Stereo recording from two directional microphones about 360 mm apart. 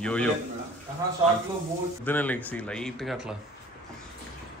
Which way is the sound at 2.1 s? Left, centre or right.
Centre.